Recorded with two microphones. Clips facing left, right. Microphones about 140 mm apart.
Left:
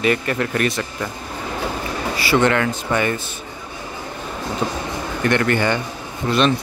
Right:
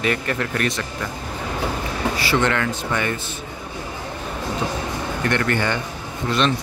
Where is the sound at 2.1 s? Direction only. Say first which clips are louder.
Left 5 dB; 5° left (ahead or behind).